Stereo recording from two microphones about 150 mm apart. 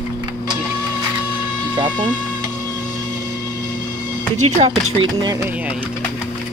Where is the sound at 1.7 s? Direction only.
30° right (ahead or behind).